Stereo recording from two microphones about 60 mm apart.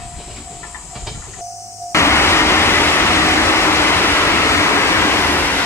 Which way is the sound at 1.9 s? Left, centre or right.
Left.